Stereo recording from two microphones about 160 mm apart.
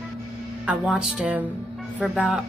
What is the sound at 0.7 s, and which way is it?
Speech, 5° right (ahead or behind).